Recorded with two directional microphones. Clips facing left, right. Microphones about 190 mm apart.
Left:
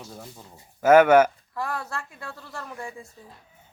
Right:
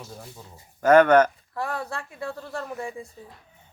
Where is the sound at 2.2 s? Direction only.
20° right (ahead or behind).